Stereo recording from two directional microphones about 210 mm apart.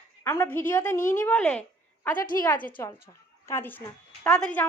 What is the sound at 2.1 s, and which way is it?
Speech, 40° left (ahead or behind).